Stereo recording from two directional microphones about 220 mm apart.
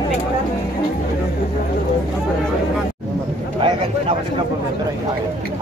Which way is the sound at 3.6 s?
25° right (ahead or behind).